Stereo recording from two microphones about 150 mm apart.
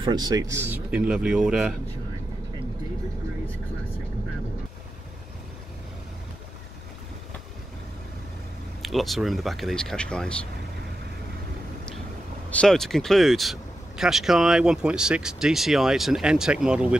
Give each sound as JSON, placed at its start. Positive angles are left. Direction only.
{"t": 0.0, "sound": "speech", "side_deg": -30}
{"t": 0.7, "sound": "speech", "side_deg": -10}
{"t": 8.8, "sound": "speech", "side_deg": 0}
{"t": 12.4, "sound": "speech", "side_deg": 5}